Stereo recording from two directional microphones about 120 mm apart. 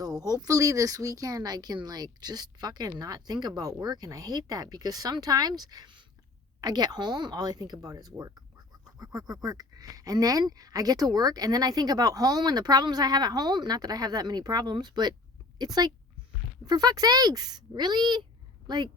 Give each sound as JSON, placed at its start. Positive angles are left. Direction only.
{"t": 0.0, "sound": "a woman's voice", "side_deg": -30}